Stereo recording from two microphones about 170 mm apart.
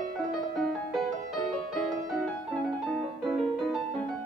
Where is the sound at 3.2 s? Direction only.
Centre (ahead or behind).